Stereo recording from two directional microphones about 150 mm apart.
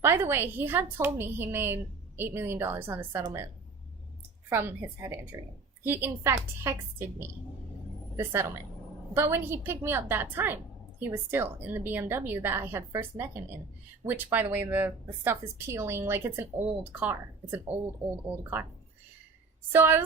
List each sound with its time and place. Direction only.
0.0 s speech: 15° right (ahead or behind)
4.4 s a woman's voice: 15° right (ahead or behind)
19.7 s speech: 15° right (ahead or behind)